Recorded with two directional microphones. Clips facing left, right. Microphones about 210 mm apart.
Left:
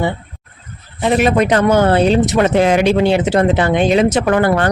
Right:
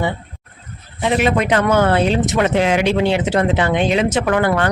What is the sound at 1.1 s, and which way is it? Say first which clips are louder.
Speech: left 3 dB; 40° left (ahead or behind).